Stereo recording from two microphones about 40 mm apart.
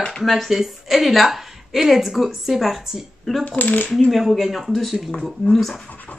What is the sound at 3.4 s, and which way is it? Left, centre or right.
Scratch, left.